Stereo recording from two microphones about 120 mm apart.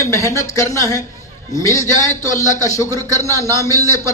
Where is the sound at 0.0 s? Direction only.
25° left (ahead or behind).